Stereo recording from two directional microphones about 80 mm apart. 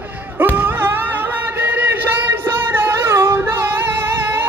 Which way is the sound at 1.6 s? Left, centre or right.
Right.